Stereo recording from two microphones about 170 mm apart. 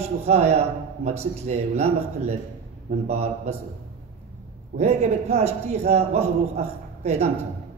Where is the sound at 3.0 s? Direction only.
40° right (ahead or behind).